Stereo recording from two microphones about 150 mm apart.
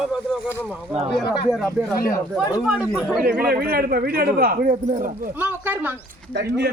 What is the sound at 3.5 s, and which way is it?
Speech, 85° right.